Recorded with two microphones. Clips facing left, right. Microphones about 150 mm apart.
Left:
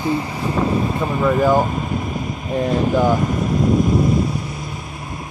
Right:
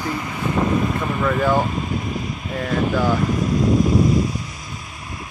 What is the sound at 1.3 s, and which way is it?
Speech, 15° left (ahead or behind).